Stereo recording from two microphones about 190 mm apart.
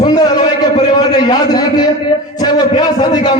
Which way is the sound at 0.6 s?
20° left (ahead or behind).